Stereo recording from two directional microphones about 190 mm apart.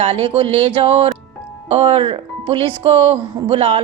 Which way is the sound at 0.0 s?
30° right (ahead or behind).